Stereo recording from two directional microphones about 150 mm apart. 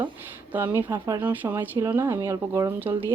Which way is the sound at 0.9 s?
25° right (ahead or behind).